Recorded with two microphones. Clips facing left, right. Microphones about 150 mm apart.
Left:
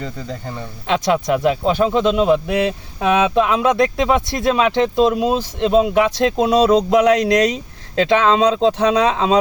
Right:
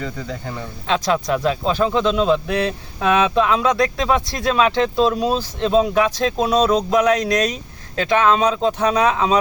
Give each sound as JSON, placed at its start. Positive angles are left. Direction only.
{"t": 0.0, "sound": "speech", "side_deg": 30}
{"t": 0.5, "sound": "speech", "side_deg": 20}
{"t": 8.0, "sound": "speech", "side_deg": 30}